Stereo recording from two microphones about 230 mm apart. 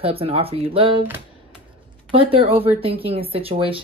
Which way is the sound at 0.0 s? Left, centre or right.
Right.